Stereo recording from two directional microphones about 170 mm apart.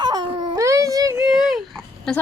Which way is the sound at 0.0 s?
25° right (ahead or behind).